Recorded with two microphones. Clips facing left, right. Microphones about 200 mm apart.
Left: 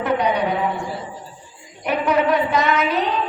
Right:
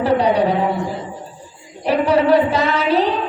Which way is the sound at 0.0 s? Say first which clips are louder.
Right 4 dB; 30° right (ahead or behind).